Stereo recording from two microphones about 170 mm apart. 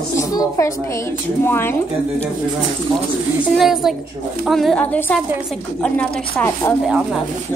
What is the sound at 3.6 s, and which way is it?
A woman's voice, centre (ahead or behind).